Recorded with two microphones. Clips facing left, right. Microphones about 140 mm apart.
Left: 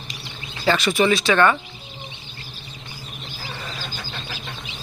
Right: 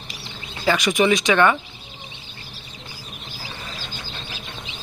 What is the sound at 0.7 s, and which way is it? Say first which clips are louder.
Speech: even; 15° right (ahead or behind).